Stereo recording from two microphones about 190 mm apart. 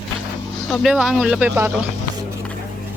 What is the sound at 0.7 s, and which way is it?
A woman's voice, 5° right (ahead or behind).